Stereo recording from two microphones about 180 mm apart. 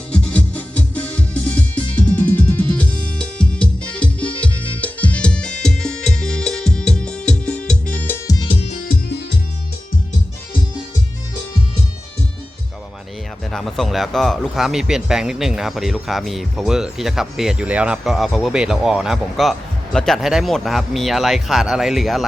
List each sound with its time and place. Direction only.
0.1 s music: 5° left (ahead or behind)
8.4 s music: 30° left (ahead or behind)
13.5 s speech: centre (ahead or behind)